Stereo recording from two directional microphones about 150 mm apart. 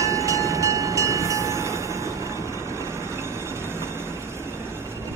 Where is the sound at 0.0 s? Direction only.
20° right (ahead or behind).